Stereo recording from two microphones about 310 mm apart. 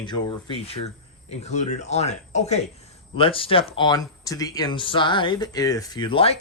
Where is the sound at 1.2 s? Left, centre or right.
Left.